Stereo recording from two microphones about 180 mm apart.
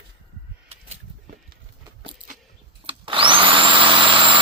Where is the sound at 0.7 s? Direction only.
35° right (ahead or behind).